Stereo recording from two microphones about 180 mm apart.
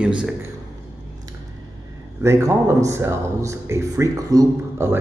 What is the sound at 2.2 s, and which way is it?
Speech, 15° right (ahead or behind).